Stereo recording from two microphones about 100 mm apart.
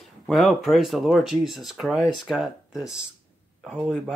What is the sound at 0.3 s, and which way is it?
Speech, centre (ahead or behind).